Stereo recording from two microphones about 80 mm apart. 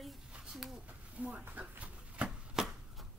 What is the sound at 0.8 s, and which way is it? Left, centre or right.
Chopping, centre.